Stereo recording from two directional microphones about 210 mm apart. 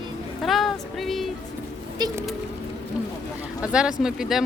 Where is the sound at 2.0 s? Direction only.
20° right (ahead or behind).